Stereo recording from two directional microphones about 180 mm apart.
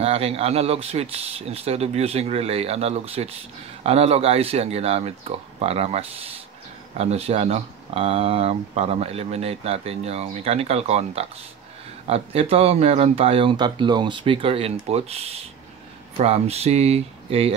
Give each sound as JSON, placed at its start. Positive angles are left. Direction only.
{"t": 0.0, "sound": "speech", "side_deg": -35}